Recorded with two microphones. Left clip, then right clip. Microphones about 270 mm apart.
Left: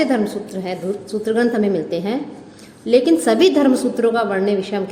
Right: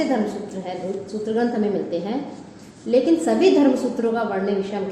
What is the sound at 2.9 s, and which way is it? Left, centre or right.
A woman's voice, left.